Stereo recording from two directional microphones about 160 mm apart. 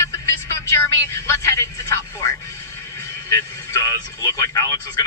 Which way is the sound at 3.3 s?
20° left (ahead or behind).